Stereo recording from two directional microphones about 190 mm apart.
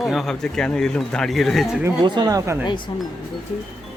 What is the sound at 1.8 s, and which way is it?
Speech, 20° right (ahead or behind).